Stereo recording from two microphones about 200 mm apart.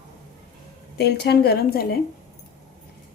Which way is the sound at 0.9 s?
55° left (ahead or behind).